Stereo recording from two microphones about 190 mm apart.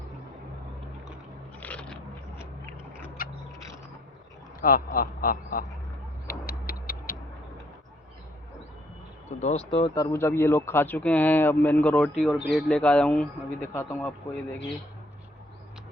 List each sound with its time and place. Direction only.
1.6 s biting: 5° left (ahead or behind)
3.2 s a sound: 50° left (ahead or behind)
4.6 s speech: 50° left (ahead or behind)
6.2 s a sound: 55° left (ahead or behind)
9.4 s speech: 35° left (ahead or behind)
9.9 s speech: 15° left (ahead or behind)